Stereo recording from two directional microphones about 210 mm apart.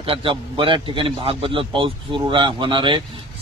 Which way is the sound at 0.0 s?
25° right (ahead or behind).